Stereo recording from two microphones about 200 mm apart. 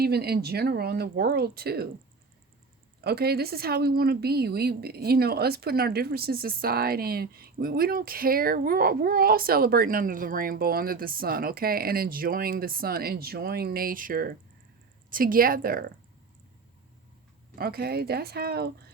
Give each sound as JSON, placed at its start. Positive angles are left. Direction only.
{"t": 0.0, "sound": "a woman's voice", "side_deg": -50}
{"t": 3.0, "sound": "a woman's voice", "side_deg": -50}
{"t": 17.6, "sound": "a woman's voice", "side_deg": -50}